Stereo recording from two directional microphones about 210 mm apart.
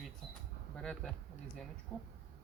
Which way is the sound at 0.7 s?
5° left (ahead or behind).